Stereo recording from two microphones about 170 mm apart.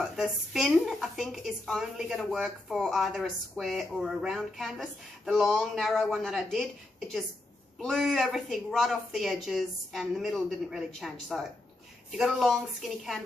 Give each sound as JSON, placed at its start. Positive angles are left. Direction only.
{"t": 0.0, "sound": "a woman's voice", "side_deg": 0}
{"t": 7.8, "sound": "a woman's voice", "side_deg": 0}